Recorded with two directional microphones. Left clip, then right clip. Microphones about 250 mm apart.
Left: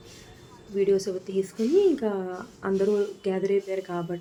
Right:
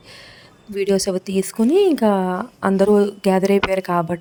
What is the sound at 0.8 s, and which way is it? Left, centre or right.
A woman's voice, right.